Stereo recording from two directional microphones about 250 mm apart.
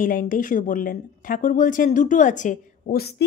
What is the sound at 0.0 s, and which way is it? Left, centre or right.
A woman's voice, left.